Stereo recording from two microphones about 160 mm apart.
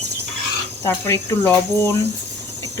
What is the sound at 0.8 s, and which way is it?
Speech, 15° left (ahead or behind).